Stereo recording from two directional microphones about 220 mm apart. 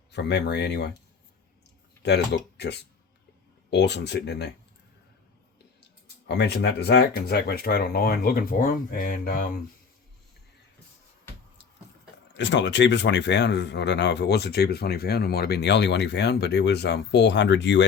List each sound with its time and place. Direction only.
0.1 s speech: 50° left (ahead or behind)
2.0 s speech: 50° left (ahead or behind)
6.2 s speech: 50° left (ahead or behind)
12.3 s speech: 55° left (ahead or behind)